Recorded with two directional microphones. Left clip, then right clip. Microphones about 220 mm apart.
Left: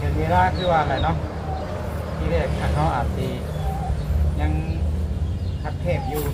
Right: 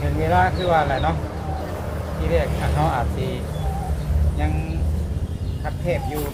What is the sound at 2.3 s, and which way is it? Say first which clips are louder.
Speech: right 2 dB; 55° right (ahead or behind).